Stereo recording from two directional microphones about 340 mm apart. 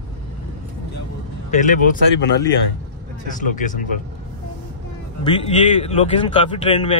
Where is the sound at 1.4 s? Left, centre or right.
Left.